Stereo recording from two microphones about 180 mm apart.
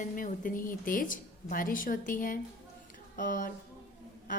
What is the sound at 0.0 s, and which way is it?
A woman's voice, 45° left (ahead or behind).